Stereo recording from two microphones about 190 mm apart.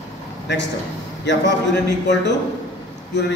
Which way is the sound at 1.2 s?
65° left (ahead or behind).